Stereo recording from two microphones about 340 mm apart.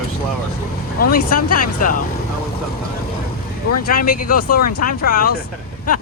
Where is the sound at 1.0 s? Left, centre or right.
Left.